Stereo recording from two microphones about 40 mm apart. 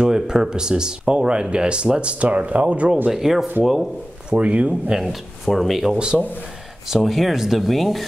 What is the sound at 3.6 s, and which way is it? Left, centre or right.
Sanding, centre.